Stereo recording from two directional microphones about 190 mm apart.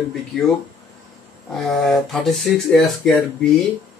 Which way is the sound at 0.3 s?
Centre (ahead or behind).